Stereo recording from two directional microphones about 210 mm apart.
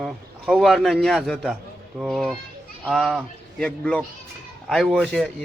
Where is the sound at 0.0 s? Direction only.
Centre (ahead or behind).